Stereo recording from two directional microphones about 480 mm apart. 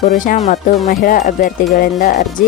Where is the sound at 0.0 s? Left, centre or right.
Centre.